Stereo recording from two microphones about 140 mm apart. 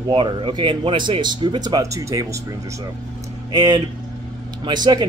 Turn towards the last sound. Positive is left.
turn(degrees=-30)  # may be behind; listen again after turning